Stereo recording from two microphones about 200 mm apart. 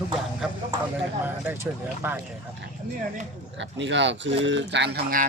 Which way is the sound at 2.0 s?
10° right (ahead or behind).